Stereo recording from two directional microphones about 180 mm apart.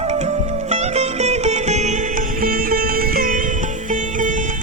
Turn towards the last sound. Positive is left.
turn(degrees=-55)  # may be behind; listen again after turning